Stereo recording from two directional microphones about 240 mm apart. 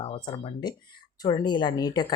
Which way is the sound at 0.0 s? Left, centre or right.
Left.